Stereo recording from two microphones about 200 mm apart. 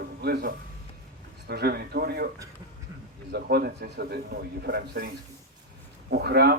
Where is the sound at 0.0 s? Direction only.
50° right (ahead or behind).